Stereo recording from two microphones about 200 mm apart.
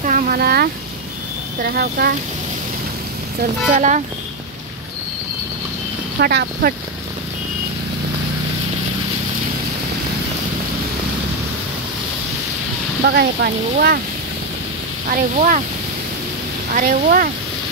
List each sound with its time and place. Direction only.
0.0 s a sound: 45° right (ahead or behind)
1.6 s speech: 50° right (ahead or behind)
3.7 s speech: 40° right (ahead or behind)
6.1 s speech: 55° right (ahead or behind)
13.0 s speech: 55° right (ahead or behind)
15.0 s speech: 40° right (ahead or behind)
16.7 s speech: 45° right (ahead or behind)